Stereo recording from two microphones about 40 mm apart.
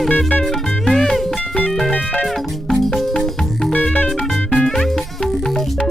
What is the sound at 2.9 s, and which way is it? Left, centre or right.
Music, centre.